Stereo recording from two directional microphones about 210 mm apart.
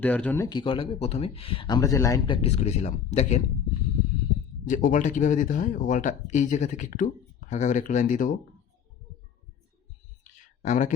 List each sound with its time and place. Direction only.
0.0 s speech: 5° left (ahead or behind); by 3.4 s 35° left (ahead or behind)
4.6 s speech: 40° left (ahead or behind)
10.6 s speech: 35° left (ahead or behind)